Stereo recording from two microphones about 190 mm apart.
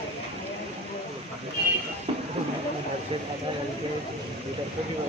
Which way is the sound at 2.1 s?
30° right (ahead or behind).